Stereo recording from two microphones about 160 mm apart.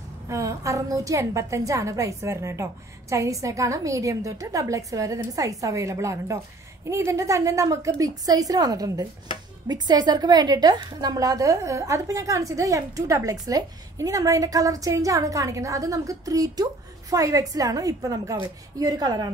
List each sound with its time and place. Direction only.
0.3 s a woman's voice: 20° right (ahead or behind)